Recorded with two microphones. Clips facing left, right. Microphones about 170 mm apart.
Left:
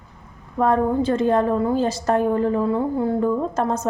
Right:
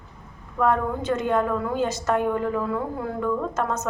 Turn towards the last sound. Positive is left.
turn(degrees=30)  # may be behind; listen again after turning